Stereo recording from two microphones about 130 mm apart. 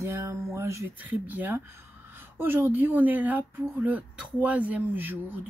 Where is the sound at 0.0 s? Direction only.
20° right (ahead or behind).